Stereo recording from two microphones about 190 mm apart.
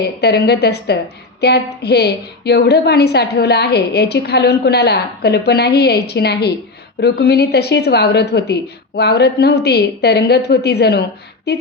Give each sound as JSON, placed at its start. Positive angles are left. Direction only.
{"t": 0.2, "sound": "a woman's voice", "side_deg": 60}